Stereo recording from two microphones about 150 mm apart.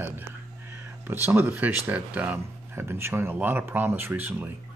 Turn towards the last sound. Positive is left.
turn(degrees=-15)  # may be behind; listen again after turning